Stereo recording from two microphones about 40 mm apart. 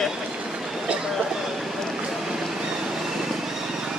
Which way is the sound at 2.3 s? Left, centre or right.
Centre.